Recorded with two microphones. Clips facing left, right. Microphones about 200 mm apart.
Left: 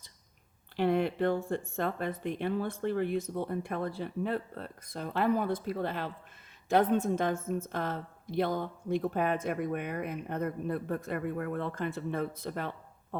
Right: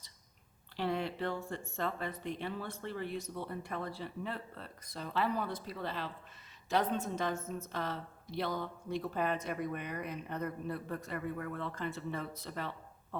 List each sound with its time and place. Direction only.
0.8 s a woman's voice: 55° left (ahead or behind)